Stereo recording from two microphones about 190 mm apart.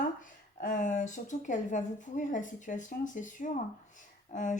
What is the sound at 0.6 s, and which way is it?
Speech, 40° left (ahead or behind).